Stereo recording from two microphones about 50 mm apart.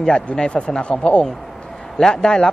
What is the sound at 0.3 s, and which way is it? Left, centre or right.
Speech, left.